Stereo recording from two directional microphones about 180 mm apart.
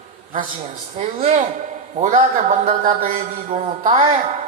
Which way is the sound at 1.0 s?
40° right (ahead or behind).